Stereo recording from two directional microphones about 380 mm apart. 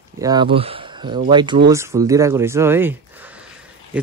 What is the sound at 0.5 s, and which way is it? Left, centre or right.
Speech, centre.